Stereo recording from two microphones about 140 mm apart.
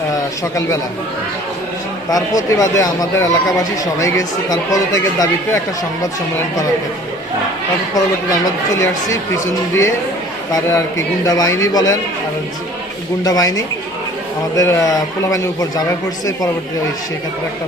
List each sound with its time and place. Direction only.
0.1 s a man's voice: 25° left (ahead or behind)
2.0 s speech: 25° left (ahead or behind)
7.9 s speech: 25° left (ahead or behind)
10.5 s speech: 20° left (ahead or behind)
13.2 s speech: 25° left (ahead or behind)